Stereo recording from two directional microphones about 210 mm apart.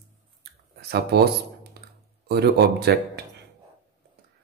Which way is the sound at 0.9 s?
50° right (ahead or behind).